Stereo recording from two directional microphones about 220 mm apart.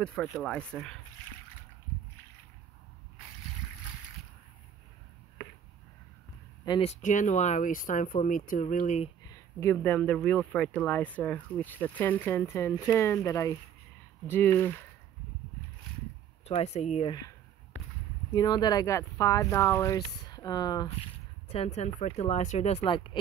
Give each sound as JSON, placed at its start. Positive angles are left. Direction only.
{"t": 0.0, "sound": "speech", "side_deg": 5}
{"t": 6.6, "sound": "speech", "side_deg": 25}
{"t": 9.3, "sound": "speech", "side_deg": 10}
{"t": 16.4, "sound": "speech", "side_deg": 30}
{"t": 17.1, "sound": "speech", "side_deg": 15}
{"t": 22.8, "sound": "speech", "side_deg": 20}